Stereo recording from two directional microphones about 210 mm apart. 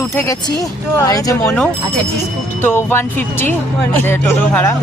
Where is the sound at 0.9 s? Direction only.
15° left (ahead or behind).